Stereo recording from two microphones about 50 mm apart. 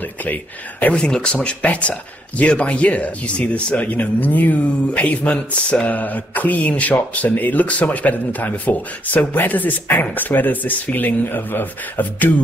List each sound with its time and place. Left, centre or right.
0.2 s speech: left
0.9 s speech: centre; by 12.3 s left